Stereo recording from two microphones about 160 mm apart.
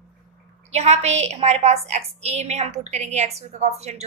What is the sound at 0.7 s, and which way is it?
A woman's voice, 45° right (ahead or behind).